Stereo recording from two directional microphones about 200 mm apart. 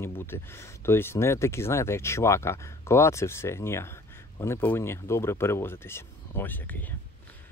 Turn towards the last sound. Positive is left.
turn(degrees=10)  # may be behind; listen again after turning